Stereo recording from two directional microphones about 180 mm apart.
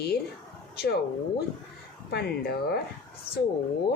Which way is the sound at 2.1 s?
60° left (ahead or behind).